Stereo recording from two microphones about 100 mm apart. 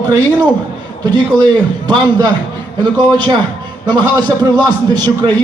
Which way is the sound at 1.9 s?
45° right (ahead or behind).